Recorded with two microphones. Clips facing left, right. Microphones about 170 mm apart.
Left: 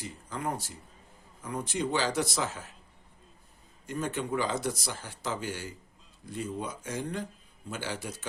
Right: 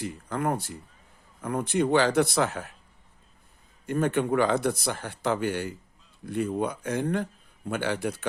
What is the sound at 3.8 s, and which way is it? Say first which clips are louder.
Speech: right 8 dB; 60° right (ahead or behind).